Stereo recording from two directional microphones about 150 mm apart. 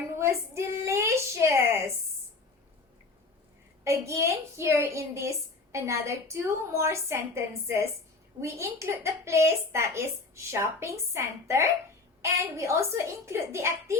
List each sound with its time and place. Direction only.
0.1 s a woman's voice: 20° right (ahead or behind)
3.8 s a woman's voice: 20° right (ahead or behind)